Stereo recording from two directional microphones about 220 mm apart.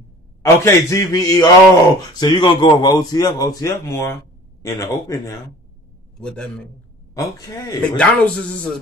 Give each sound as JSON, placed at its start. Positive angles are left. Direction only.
{"t": 0.4, "sound": "a man's voice", "side_deg": 15}
{"t": 6.1, "sound": "a man's voice", "side_deg": 5}
{"t": 8.0, "sound": "speech", "side_deg": 5}